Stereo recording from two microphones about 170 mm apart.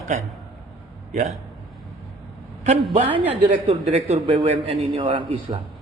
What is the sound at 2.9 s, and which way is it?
A man's voice, 35° right (ahead or behind).